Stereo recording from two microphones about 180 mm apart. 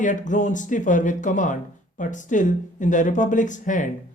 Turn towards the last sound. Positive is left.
turn(degrees=45)  # may be behind; listen again after turning